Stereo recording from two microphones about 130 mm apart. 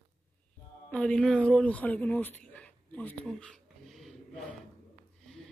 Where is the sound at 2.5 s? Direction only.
10° left (ahead or behind).